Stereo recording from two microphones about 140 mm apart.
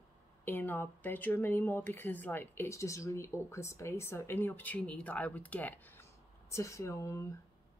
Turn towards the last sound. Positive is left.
turn(degrees=20)  # may be behind; listen again after turning